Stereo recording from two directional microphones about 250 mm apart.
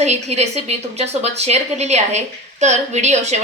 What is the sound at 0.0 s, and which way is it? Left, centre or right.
A woman's voice, right.